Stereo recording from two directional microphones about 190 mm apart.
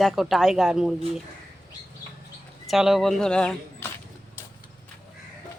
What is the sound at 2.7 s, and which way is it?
Speech, centre (ahead or behind).